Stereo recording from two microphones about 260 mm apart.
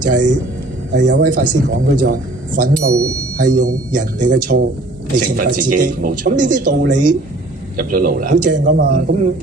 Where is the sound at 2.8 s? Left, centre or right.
Right.